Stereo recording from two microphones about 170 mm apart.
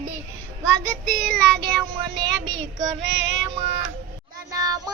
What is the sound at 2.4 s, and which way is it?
Child singing, 90° right.